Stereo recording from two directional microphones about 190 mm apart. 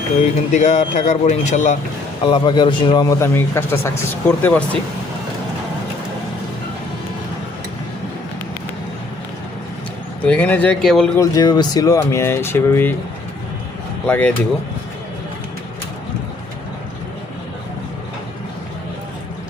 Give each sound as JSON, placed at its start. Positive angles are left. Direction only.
{"t": 0.5, "sound": "speech", "side_deg": 35}
{"t": 2.2, "sound": "speech", "side_deg": 25}
{"t": 10.2, "sound": "speech", "side_deg": 10}
{"t": 11.2, "sound": "speech", "side_deg": 20}
{"t": 14.1, "sound": "speech", "side_deg": 10}